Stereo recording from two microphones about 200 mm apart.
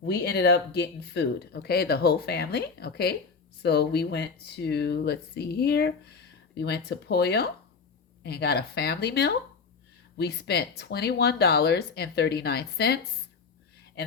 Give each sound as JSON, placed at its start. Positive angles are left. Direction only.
{"t": 0.0, "sound": "speech", "side_deg": 55}